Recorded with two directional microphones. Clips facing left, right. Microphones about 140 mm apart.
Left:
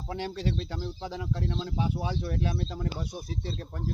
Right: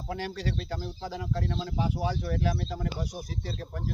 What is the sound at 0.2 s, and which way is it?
Speech, 20° left (ahead or behind).